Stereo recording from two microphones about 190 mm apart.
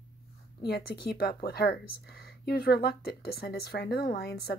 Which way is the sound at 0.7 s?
55° left (ahead or behind).